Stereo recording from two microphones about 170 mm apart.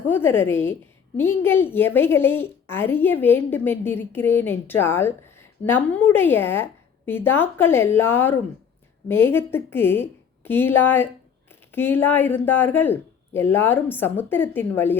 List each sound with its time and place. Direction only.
0.1 s a woman's voice: 15° left (ahead or behind)